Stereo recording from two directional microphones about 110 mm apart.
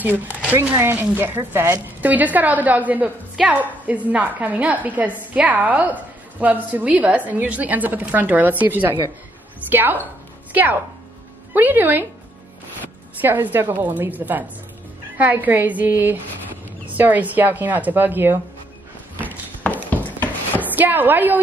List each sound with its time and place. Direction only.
0.0 s a woman's voice: 15° right (ahead or behind)
13.2 s speech: 15° right (ahead or behind)
19.6 s a sound: 15° left (ahead or behind)
20.6 s a woman's voice: 15° right (ahead or behind)